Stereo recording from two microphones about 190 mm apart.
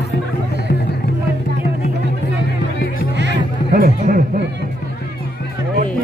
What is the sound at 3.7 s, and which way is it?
Music, 45° right (ahead or behind).